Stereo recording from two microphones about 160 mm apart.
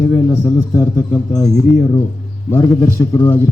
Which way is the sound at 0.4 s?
20° left (ahead or behind).